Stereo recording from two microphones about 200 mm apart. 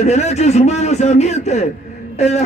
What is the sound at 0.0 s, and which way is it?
A man's voice, 35° left (ahead or behind).